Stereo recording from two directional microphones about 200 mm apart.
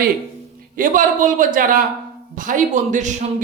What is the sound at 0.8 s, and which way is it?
A man's voice, 40° right (ahead or behind).